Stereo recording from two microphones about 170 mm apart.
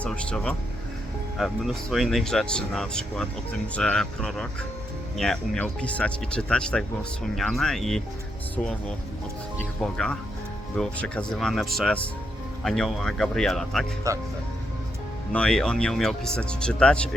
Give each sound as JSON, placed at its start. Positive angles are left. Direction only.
{"t": 0.0, "sound": "speech", "side_deg": 5}
{"t": 9.8, "sound": "speech", "side_deg": 5}
{"t": 14.1, "sound": "speech", "side_deg": -20}
{"t": 15.3, "sound": "speech", "side_deg": 5}